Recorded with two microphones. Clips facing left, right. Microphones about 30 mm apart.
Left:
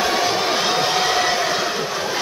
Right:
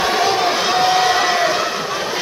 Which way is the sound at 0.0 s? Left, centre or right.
Centre.